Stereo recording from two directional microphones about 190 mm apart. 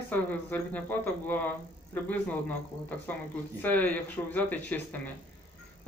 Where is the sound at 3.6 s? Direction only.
10° left (ahead or behind).